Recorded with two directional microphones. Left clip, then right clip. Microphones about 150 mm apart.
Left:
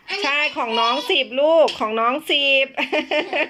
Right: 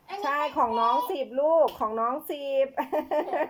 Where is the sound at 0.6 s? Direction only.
25° left (ahead or behind).